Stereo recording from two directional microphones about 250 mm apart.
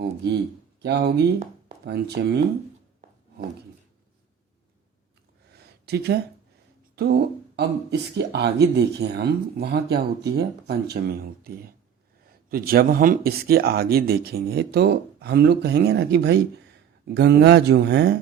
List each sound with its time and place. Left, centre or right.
0.0 s speech: right
5.8 s speech: right